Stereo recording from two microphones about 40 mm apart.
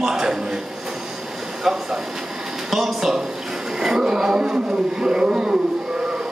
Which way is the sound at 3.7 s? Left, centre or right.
Centre.